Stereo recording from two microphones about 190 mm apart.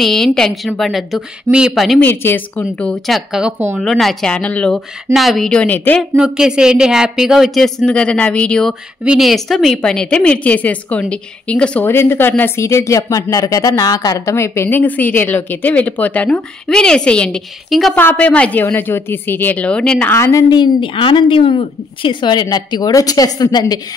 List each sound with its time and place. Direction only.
0.0 s speech: centre (ahead or behind)
2.0 s speech: 10° left (ahead or behind)
6.1 s a woman's voice: 5° right (ahead or behind); by 23.8 s 20° left (ahead or behind)